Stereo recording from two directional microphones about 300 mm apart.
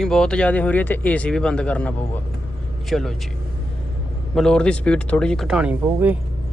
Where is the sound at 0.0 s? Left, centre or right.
Centre.